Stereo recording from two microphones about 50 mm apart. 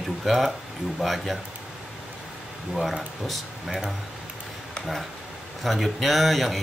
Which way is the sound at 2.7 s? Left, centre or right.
Centre.